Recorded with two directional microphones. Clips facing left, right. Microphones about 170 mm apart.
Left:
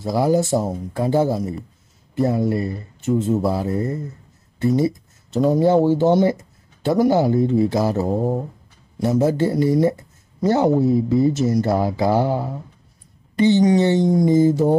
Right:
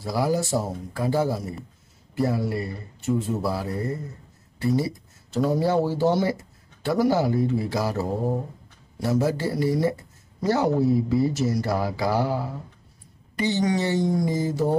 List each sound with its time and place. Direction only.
0.0 s speech: 20° left (ahead or behind)